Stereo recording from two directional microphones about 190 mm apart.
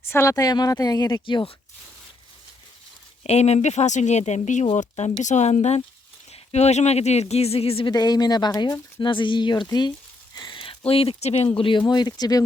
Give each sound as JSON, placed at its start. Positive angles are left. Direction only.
{"t": 0.0, "sound": "speech", "side_deg": 15}
{"t": 3.2, "sound": "speech", "side_deg": 35}